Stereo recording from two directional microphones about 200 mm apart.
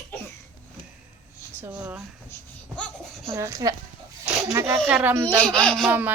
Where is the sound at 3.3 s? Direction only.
15° right (ahead or behind).